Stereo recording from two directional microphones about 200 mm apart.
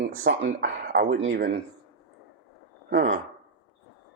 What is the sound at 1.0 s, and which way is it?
Speech, 80° right.